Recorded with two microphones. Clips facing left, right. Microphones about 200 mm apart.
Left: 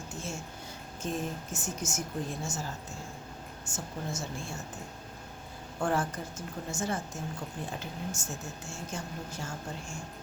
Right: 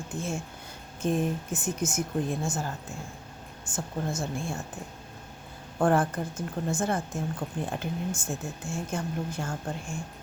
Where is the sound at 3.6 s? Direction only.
55° right (ahead or behind).